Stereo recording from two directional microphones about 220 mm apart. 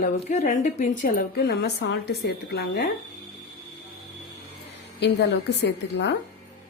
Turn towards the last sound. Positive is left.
turn(degrees=50)  # may be behind; listen again after turning